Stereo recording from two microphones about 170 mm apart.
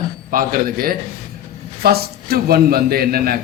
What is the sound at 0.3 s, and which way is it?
A man's voice, 55° right (ahead or behind).